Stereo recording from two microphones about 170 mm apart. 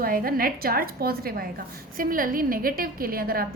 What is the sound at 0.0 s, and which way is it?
A woman's voice, 60° right (ahead or behind).